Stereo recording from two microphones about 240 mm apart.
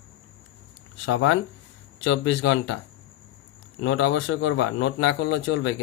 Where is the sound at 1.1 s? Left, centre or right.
Left.